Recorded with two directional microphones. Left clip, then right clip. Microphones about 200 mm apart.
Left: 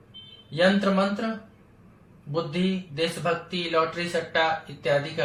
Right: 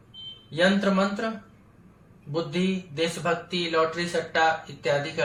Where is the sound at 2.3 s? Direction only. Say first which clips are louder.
Even; 15° right (ahead or behind).